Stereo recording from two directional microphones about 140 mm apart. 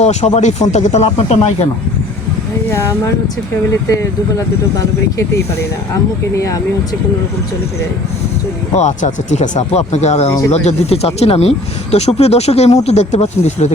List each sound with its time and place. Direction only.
0.0 s speech: 55° left (ahead or behind)
2.6 s speech: 20° left (ahead or behind)
5.9 s speech: 25° left (ahead or behind)
8.7 s speech: 55° left (ahead or behind)